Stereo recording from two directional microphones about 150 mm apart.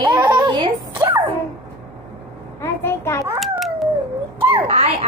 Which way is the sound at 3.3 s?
Centre (ahead or behind).